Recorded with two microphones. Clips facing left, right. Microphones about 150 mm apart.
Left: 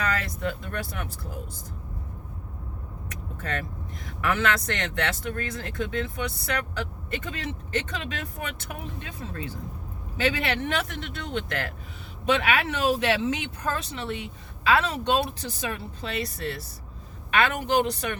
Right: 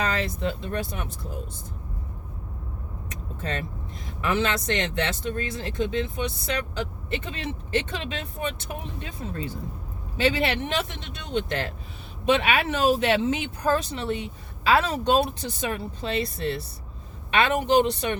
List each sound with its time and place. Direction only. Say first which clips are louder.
0.0 s speech: right 2 dB; 30° right (ahead or behind)
3.4 s speech: right 1 dB; 25° right (ahead or behind)